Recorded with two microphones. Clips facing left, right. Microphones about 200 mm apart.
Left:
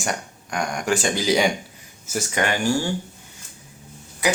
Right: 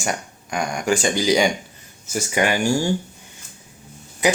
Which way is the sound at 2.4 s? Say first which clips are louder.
Right 3 dB; 10° right (ahead or behind).